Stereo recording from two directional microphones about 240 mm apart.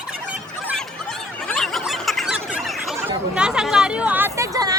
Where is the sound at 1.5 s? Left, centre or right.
Centre.